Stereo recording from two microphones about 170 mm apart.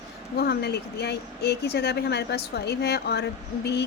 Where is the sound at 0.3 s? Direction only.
70° left (ahead or behind).